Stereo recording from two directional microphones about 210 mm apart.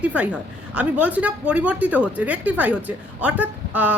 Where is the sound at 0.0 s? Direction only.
5° right (ahead or behind).